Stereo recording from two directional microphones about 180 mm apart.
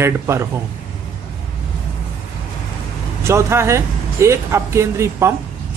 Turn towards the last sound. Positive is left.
turn(degrees=-15)  # may be behind; listen again after turning